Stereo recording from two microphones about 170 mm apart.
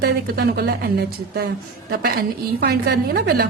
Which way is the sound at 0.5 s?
70° right (ahead or behind).